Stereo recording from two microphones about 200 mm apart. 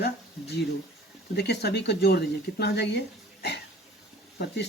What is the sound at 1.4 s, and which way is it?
Speech, 55° left (ahead or behind).